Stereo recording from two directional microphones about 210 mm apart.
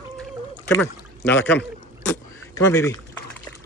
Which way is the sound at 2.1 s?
15° left (ahead or behind).